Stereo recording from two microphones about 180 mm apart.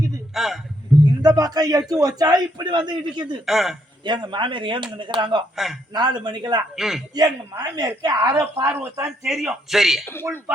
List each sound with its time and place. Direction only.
0.3 s a man's voice: centre (ahead or behind)
0.9 s a sound: centre (ahead or behind)
1.4 s a man's voice: 20° right (ahead or behind)
3.4 s a man's voice: centre (ahead or behind)
4.0 s a man's voice: 25° right (ahead or behind)
5.5 s a man's voice: centre (ahead or behind)
5.9 s a man's voice: 25° right (ahead or behind)
6.7 s a man's voice: centre (ahead or behind)
7.1 s a man's voice: 20° right (ahead or behind)
8.6 s a man's voice: 10° right (ahead or behind)